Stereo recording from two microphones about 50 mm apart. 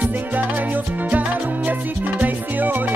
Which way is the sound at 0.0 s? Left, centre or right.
Right.